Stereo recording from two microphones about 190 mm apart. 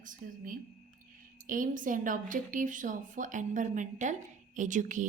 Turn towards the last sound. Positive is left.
turn(degrees=-40)  # may be behind; listen again after turning